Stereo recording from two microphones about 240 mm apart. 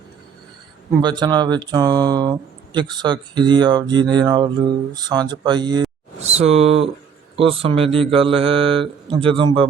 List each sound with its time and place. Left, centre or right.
1.0 s speech: centre